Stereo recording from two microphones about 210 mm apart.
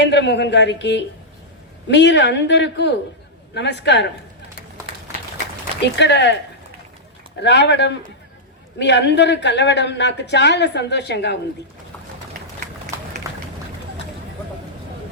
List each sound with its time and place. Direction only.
0.0 s speech: 55° left (ahead or behind)
6.0 s speech: 55° left (ahead or behind)
7.4 s speech: 55° left (ahead or behind)
13.2 s run: 15° right (ahead or behind)